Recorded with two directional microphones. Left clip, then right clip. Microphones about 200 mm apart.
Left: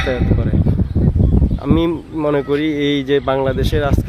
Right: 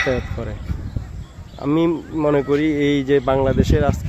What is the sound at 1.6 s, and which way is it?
Speech, 5° right (ahead or behind).